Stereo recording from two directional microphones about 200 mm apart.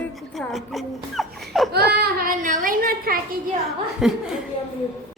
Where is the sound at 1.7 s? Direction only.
50° right (ahead or behind).